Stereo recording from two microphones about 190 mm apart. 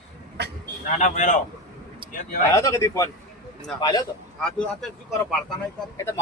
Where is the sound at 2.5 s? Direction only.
15° left (ahead or behind).